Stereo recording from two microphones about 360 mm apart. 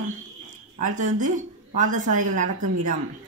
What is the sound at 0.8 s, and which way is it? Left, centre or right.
Speech, right.